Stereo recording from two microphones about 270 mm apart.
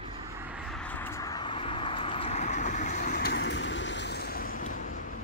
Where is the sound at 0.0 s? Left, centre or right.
Centre; by 5.0 s left.